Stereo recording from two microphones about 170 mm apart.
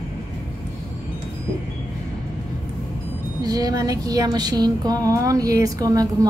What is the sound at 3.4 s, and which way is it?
Music, 20° right (ahead or behind).